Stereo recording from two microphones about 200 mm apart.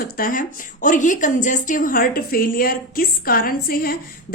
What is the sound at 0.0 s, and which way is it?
A woman's voice, 45° left (ahead or behind).